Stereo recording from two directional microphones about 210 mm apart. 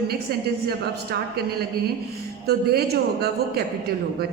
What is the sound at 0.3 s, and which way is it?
A man's voice, 45° right (ahead or behind).